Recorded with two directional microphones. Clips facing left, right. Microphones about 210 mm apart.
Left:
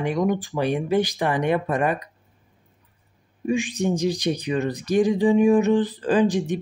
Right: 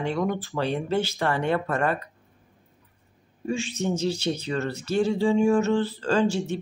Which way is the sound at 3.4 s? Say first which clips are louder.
Left 5 dB; 15° left (ahead or behind).